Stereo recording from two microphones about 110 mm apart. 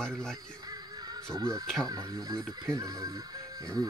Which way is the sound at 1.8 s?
35° right (ahead or behind).